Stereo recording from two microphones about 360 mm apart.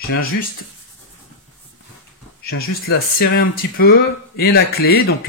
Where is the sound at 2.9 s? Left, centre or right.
Left.